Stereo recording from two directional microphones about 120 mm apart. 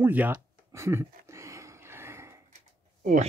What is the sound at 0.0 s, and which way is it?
Speech, 15° right (ahead or behind).